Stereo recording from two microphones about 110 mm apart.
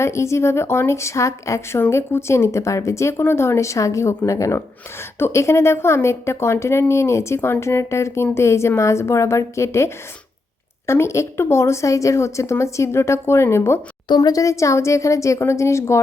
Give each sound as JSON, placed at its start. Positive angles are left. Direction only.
{"t": 0.0, "sound": "a woman's voice", "side_deg": 25}